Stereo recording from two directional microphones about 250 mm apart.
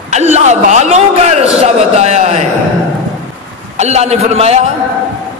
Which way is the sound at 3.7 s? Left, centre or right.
Right.